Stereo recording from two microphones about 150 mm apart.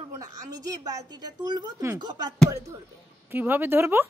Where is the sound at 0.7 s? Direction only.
25° right (ahead or behind).